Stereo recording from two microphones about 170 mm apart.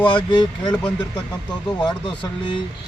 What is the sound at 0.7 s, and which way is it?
Speech, 5° left (ahead or behind).